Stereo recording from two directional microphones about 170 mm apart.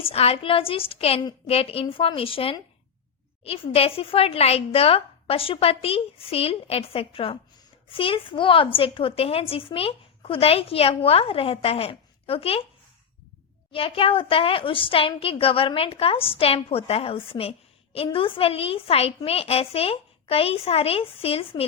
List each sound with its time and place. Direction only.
0.0 s a woman's voice: 35° left (ahead or behind)
13.7 s a woman's voice: 30° left (ahead or behind)